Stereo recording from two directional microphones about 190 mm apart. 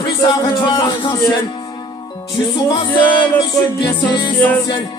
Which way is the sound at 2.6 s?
25° left (ahead or behind).